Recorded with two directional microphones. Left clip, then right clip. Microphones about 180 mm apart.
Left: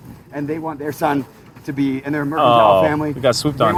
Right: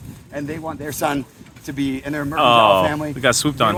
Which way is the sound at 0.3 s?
55° right (ahead or behind).